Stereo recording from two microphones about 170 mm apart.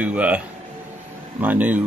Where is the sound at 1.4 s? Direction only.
10° right (ahead or behind).